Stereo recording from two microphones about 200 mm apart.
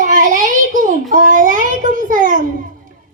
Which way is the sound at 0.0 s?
40° right (ahead or behind).